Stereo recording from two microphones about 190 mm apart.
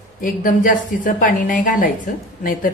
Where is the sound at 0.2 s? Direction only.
45° left (ahead or behind).